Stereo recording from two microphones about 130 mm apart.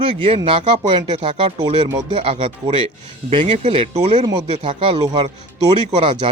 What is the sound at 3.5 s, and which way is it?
Speech, 50° right (ahead or behind).